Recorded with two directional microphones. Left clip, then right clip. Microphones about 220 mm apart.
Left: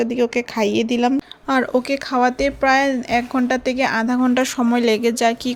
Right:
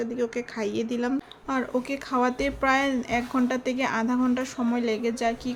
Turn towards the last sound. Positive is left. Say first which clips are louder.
# left 9 dB
turn(degrees=35)  # may be behind; listen again after turning